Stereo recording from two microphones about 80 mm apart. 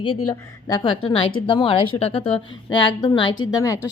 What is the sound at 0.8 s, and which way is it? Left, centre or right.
Speech, left.